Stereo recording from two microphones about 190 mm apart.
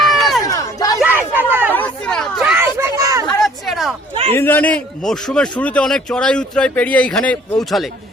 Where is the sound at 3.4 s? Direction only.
Centre (ahead or behind).